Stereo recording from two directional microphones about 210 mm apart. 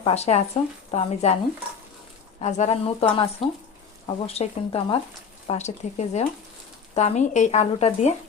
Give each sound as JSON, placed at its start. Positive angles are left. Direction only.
{"t": 0.0, "sound": "speech", "side_deg": 30}
{"t": 2.4, "sound": "speech", "side_deg": 35}